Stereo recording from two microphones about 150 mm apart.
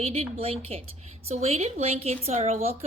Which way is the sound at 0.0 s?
40° right (ahead or behind).